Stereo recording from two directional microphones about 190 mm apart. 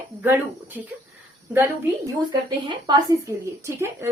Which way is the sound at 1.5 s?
10° right (ahead or behind).